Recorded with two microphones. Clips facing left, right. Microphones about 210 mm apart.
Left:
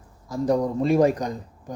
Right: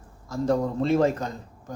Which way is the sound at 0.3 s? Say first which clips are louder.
Left 2 dB; 15° left (ahead or behind).